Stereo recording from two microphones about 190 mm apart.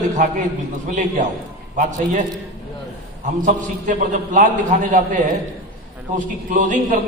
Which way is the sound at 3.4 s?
40° right (ahead or behind).